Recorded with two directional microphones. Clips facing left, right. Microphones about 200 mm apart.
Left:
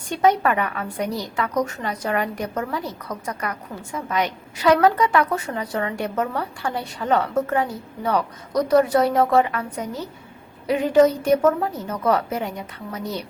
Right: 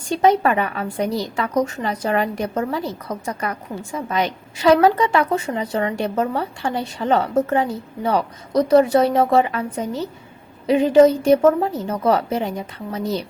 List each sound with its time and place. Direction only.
0.1 s a woman's voice: 30° right (ahead or behind)